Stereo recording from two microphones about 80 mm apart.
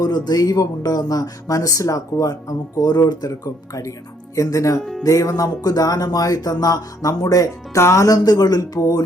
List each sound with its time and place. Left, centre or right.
0.0 s speech: left
4.8 s speech: centre
5.0 s speech: left